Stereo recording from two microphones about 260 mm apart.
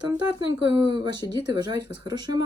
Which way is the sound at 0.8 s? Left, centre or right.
Centre.